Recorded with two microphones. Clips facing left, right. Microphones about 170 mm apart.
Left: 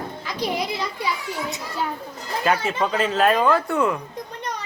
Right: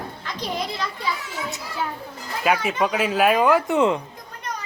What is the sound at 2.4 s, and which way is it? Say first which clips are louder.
Speech: right 1 dB; 10° right (ahead or behind).